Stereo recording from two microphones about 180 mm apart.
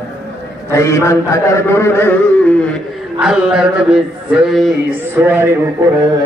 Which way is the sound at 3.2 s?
5° right (ahead or behind).